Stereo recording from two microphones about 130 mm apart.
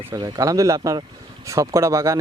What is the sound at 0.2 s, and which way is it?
A man's voice, 25° right (ahead or behind).